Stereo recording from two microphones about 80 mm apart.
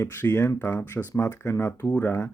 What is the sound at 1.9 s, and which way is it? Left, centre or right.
Speech, left.